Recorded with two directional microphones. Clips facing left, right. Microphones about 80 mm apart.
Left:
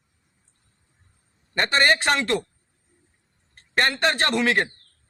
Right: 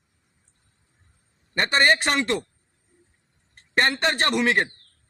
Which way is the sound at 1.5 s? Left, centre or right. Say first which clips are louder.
Even; right.